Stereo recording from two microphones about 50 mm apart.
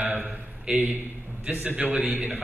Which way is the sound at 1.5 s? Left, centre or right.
Right.